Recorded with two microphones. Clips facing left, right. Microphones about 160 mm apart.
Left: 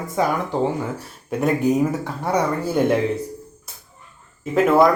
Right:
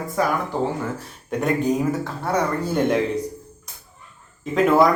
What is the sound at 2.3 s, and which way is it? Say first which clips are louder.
Speech: left 2 dB; 5° left (ahead or behind).